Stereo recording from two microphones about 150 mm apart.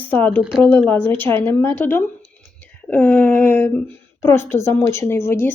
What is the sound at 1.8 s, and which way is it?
Speech, 15° left (ahead or behind).